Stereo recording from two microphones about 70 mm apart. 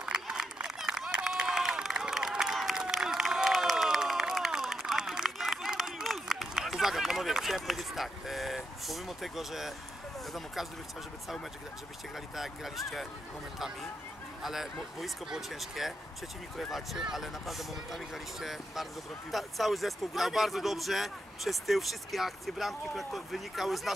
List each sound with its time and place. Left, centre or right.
0.0 s a sound: centre
10.3 s speech: centre
12.4 s speech: centre
14.4 s speech: centre